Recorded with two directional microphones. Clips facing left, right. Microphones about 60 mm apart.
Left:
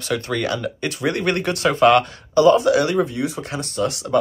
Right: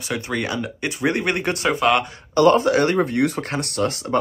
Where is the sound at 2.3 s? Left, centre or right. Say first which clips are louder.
Left 1 dB; right.